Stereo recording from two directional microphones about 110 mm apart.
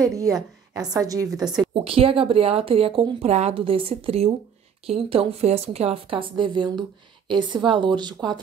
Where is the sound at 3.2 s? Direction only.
75° right (ahead or behind).